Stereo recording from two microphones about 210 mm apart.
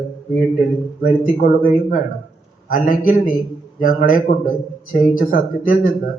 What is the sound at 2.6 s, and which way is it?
A man's voice, 40° left (ahead or behind).